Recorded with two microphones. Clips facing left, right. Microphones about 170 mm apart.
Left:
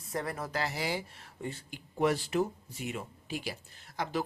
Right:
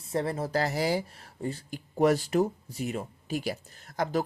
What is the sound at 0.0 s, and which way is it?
Speech, 30° right (ahead or behind).